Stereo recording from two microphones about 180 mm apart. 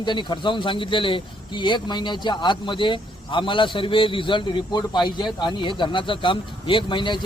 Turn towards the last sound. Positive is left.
turn(degrees=25)  # may be behind; listen again after turning